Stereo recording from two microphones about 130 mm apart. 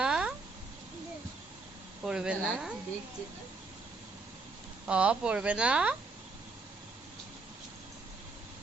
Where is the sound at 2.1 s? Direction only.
5° right (ahead or behind).